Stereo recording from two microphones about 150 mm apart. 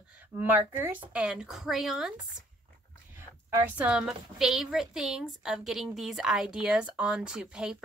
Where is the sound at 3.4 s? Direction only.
15° right (ahead or behind).